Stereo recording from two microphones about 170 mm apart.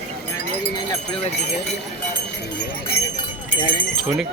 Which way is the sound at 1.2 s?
40° left (ahead or behind).